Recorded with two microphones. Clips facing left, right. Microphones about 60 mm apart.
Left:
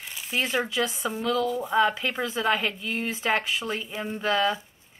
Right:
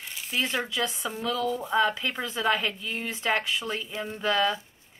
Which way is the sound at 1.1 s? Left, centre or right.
Centre.